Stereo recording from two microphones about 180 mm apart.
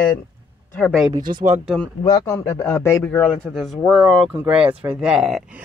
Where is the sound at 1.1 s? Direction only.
50° right (ahead or behind).